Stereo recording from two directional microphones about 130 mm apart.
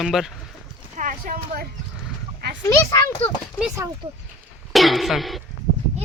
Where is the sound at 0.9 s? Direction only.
90° right.